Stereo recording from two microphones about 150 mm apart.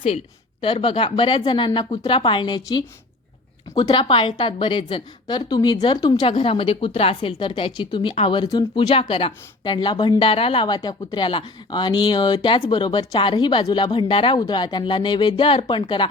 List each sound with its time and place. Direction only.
0.6 s a woman's voice: 35° left (ahead or behind)
8.9 s a woman's voice: 40° left (ahead or behind)